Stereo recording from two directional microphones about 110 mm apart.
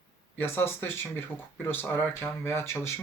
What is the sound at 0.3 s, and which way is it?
Speech, 20° left (ahead or behind).